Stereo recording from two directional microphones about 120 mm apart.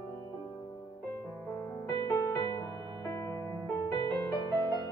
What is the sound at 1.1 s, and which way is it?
Music, 15° left (ahead or behind).